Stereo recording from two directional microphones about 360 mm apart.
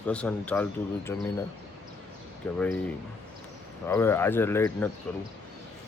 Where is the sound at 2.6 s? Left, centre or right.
Centre.